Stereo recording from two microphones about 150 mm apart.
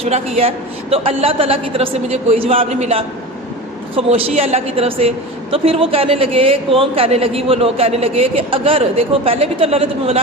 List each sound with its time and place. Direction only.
0.0 s a woman's voice: 45° right (ahead or behind)